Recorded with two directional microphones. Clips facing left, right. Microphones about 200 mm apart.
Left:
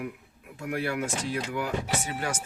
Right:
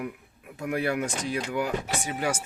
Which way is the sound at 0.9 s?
20° right (ahead or behind).